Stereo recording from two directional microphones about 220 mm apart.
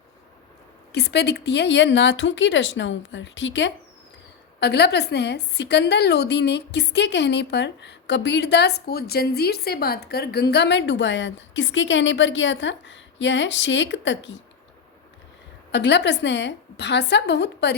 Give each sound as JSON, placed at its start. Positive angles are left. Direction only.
{"t": 0.9, "sound": "a woman's voice", "side_deg": 50}
{"t": 15.7, "sound": "a woman's voice", "side_deg": 50}